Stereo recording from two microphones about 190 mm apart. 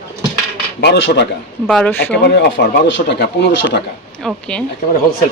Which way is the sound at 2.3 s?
60° left (ahead or behind).